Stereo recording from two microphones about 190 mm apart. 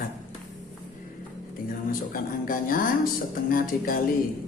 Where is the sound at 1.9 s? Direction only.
50° left (ahead or behind).